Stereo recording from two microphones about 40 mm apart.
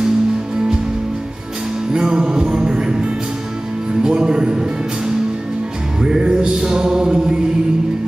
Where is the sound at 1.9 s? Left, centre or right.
Centre.